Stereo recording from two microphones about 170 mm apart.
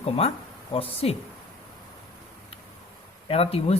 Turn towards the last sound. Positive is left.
turn(degrees=35)  # may be behind; listen again after turning